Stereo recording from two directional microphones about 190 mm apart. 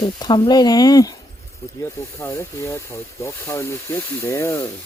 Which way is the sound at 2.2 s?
15° left (ahead or behind).